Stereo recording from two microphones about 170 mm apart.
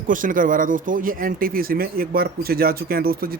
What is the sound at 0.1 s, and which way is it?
Speech, 50° right (ahead or behind).